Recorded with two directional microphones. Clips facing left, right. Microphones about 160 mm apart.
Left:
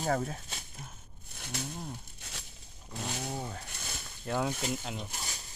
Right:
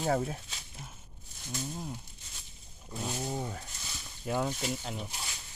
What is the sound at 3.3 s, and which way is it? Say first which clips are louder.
Speech: right 2 dB; centre (ahead or behind).